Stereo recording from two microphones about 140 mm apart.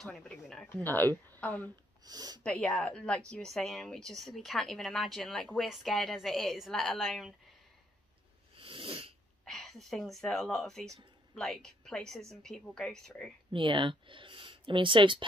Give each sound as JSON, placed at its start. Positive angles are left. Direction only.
{"t": 0.0, "sound": "a woman's voice", "side_deg": 5}
{"t": 2.0, "sound": "speech", "side_deg": -30}
{"t": 2.4, "sound": "a woman's voice", "side_deg": 5}
{"t": 8.5, "sound": "sneeze", "side_deg": -40}
{"t": 9.4, "sound": "a woman's voice", "side_deg": 0}
{"t": 13.5, "sound": "speech", "side_deg": -35}